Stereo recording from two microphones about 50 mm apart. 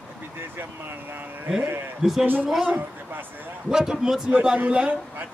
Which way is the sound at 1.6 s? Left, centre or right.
Right.